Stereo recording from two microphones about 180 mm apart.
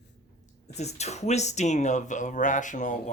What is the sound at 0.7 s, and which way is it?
Speech, 40° left (ahead or behind).